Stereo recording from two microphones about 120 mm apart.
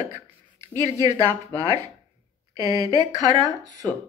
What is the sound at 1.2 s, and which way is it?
A woman's voice, 30° right (ahead or behind).